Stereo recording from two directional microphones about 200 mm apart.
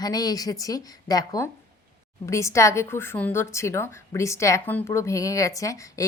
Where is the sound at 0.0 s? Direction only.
20° left (ahead or behind).